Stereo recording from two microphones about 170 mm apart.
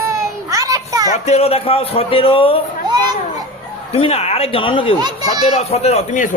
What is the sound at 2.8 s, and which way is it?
Children playing, 25° right (ahead or behind).